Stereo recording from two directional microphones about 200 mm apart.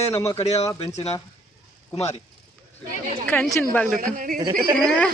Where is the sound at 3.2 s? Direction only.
5° left (ahead or behind).